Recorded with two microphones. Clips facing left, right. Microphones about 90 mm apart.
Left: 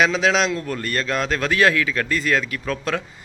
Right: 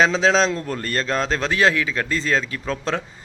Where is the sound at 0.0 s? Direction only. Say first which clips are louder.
Right 1 dB; 30° right (ahead or behind).